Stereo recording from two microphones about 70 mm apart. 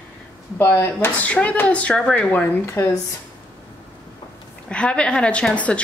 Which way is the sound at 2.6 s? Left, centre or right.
Left.